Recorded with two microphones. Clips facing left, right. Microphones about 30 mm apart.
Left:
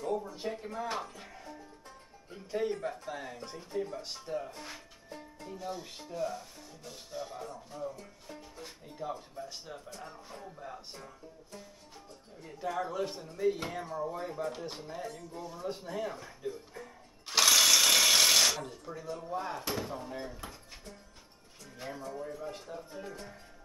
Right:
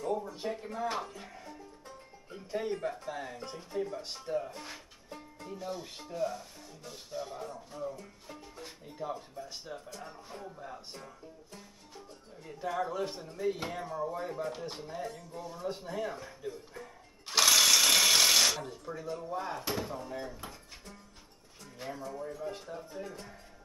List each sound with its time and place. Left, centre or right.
0.4 s speech: centre